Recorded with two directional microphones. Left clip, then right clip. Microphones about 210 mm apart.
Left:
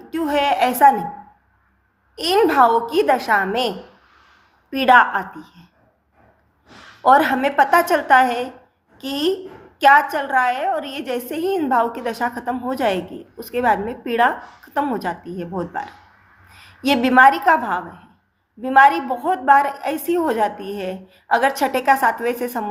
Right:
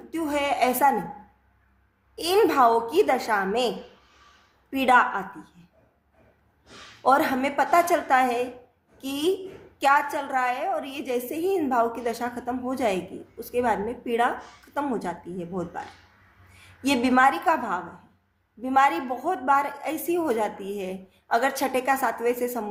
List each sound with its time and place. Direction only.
0.1 s a woman's voice: 15° left (ahead or behind)
2.1 s a woman's voice: 10° left (ahead or behind)
4.7 s a woman's voice: 15° left (ahead or behind)
7.0 s a woman's voice: 15° left (ahead or behind)
16.8 s a woman's voice: 15° left (ahead or behind)